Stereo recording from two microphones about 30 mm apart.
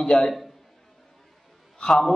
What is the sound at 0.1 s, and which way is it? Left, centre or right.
Speech, left.